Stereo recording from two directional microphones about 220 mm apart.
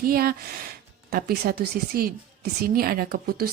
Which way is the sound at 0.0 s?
40° right (ahead or behind).